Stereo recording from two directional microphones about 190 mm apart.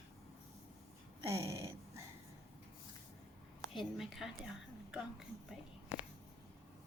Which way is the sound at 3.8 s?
Centre (ahead or behind).